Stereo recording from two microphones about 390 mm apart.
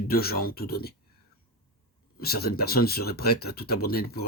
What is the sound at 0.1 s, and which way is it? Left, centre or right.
Speech, left.